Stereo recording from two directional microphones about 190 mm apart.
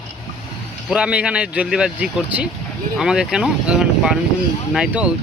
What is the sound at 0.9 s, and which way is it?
Speech, 5° right (ahead or behind).